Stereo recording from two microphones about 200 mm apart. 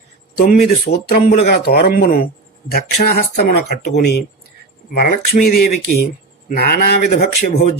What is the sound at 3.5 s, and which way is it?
Speech, 45° left (ahead or behind).